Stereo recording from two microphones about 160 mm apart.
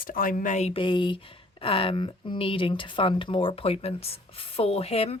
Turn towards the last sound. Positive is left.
turn(degrees=40)  # may be behind; listen again after turning